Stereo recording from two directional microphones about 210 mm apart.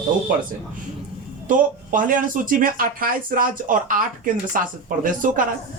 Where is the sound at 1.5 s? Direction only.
40° right (ahead or behind).